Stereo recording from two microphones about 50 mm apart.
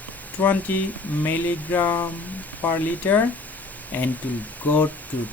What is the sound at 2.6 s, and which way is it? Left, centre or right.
Speech, left.